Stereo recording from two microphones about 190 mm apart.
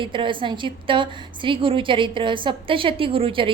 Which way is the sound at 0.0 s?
25° right (ahead or behind).